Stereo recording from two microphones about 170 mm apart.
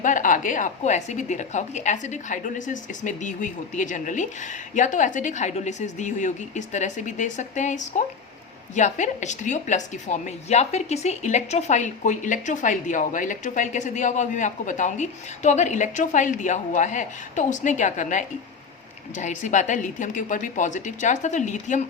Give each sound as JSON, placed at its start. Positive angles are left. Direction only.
{"t": 0.0, "sound": "a woman's voice", "side_deg": 50}